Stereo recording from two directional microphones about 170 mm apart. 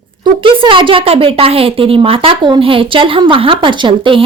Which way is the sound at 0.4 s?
30° right (ahead or behind).